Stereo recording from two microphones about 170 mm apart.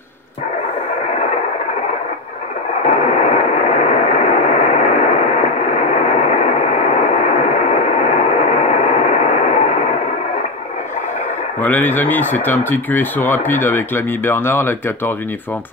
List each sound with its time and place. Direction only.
2.8 s radio: 35° left (ahead or behind)
11.6 s speech: 10° left (ahead or behind)